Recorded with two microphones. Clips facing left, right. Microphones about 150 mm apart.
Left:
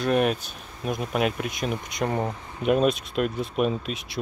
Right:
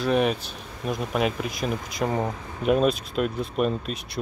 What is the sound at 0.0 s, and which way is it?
Speech, centre (ahead or behind).